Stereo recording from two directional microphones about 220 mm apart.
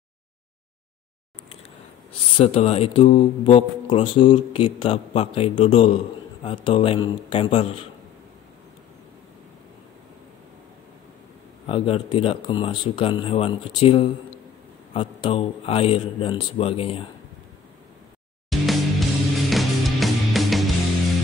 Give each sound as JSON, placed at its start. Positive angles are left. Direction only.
{"t": 2.3, "sound": "speech", "side_deg": 30}
{"t": 11.6, "sound": "speech", "side_deg": 25}
{"t": 18.5, "sound": "music", "side_deg": 0}